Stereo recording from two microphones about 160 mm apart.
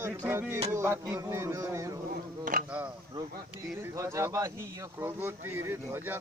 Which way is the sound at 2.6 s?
10° right (ahead or behind).